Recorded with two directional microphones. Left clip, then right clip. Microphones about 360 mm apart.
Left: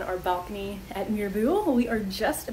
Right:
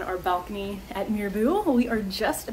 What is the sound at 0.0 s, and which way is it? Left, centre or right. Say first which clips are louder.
Speech: right 1 dB; centre.